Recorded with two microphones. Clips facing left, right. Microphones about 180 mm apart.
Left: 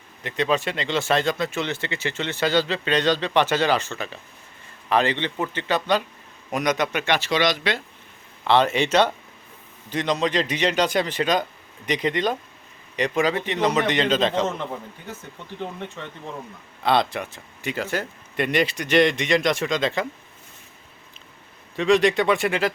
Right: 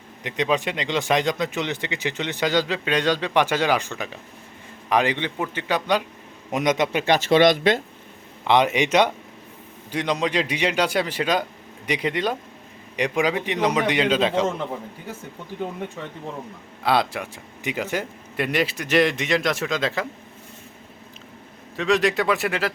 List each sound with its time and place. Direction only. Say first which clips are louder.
0.2 s speech: even; 15° right (ahead or behind)
6.5 s a man's voice: right 2 dB; 25° right (ahead or behind)
7.0 s speech: right 3 dB; 40° right (ahead or behind)
7.3 s speech: right 6 dB; 50° right (ahead or behind)
8.4 s speech: even; 15° right (ahead or behind)
18.3 s a man's voice: left 1 dB; 5° right (ahead or behind)
21.8 s a man's voice: left 2 dB; centre (ahead or behind)